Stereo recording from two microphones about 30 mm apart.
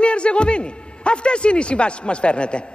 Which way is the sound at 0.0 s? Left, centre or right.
Left.